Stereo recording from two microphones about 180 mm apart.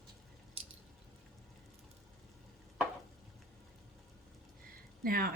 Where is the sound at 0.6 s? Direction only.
30° right (ahead or behind).